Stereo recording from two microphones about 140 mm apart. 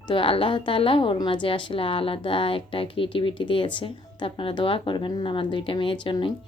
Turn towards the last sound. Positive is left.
turn(degrees=35)  # may be behind; listen again after turning